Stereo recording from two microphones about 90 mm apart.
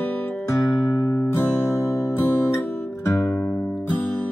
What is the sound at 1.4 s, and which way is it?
Music, 30° left (ahead or behind).